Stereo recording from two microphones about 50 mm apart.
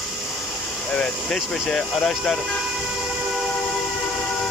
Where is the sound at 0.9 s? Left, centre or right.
Left.